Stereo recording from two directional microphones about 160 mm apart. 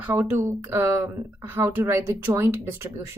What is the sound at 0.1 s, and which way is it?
Speech, 10° right (ahead or behind).